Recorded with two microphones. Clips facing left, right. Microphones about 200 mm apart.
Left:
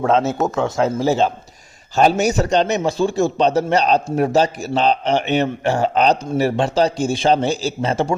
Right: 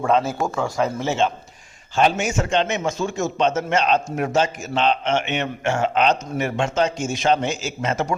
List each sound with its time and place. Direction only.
0.1 s speech: 25° left (ahead or behind)
0.9 s a man's voice: 35° left (ahead or behind)